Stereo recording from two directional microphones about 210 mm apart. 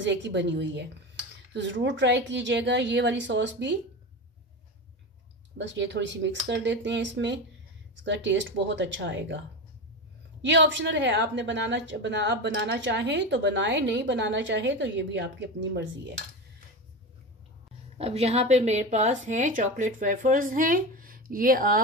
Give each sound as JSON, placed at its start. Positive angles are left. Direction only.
{"t": 0.0, "sound": "a woman's voice", "side_deg": -60}
{"t": 5.6, "sound": "a woman's voice", "side_deg": -55}
{"t": 10.4, "sound": "a woman's voice", "side_deg": -60}
{"t": 17.9, "sound": "a woman's voice", "side_deg": -30}